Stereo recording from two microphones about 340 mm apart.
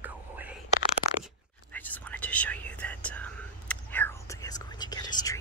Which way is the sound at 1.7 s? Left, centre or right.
Centre.